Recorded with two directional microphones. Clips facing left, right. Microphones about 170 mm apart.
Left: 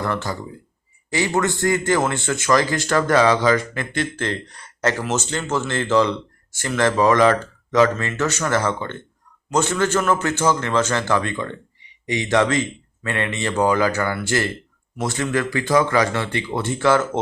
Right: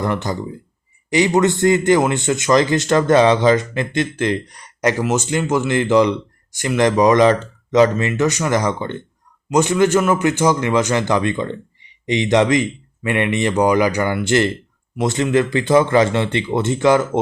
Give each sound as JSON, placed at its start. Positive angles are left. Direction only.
{"t": 0.0, "sound": "a man's voice", "side_deg": -20}